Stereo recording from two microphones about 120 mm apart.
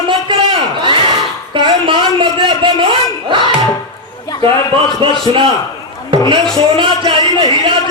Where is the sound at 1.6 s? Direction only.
40° right (ahead or behind).